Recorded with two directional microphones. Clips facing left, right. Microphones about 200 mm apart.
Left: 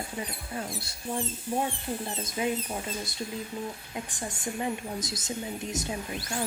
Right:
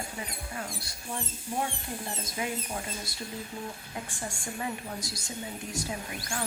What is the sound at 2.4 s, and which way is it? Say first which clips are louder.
Speech: left 5 dB; 25° left (ahead or behind).